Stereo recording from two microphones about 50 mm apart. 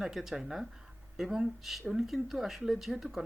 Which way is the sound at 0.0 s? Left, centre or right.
Centre.